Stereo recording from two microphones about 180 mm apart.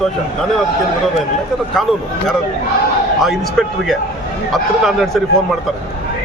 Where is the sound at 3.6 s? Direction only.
Centre (ahead or behind).